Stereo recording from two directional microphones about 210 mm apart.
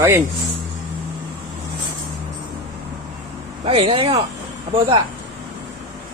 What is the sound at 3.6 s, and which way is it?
Speech, 25° right (ahead or behind).